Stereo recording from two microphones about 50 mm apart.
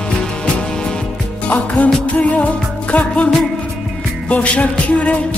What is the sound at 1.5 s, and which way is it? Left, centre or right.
Music, left.